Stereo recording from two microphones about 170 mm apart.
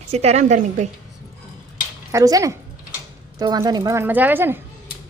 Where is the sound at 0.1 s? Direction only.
40° right (ahead or behind).